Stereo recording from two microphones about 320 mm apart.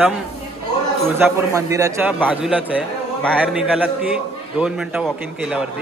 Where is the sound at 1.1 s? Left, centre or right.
Centre.